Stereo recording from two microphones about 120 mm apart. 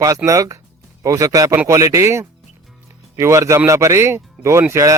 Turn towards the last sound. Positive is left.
turn(degrees=-25)  # may be behind; listen again after turning